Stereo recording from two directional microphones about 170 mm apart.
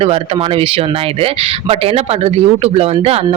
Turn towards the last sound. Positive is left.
turn(degrees=-35)  # may be behind; listen again after turning